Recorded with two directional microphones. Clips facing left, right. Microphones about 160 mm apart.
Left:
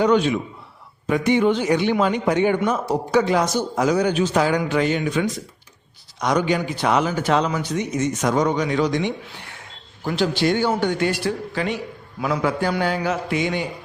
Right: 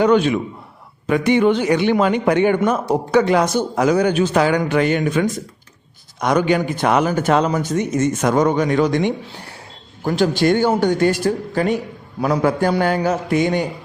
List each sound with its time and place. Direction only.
0.0 s a man's voice: 60° right (ahead or behind)
1.0 s a man's voice: 70° right (ahead or behind); by 13.7 s 45° right (ahead or behind)